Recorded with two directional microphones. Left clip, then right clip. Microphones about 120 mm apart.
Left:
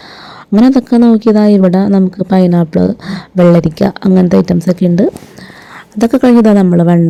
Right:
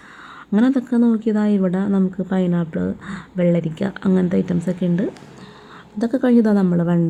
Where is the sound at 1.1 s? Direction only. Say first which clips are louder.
Left 12 dB; 50° left (ahead or behind).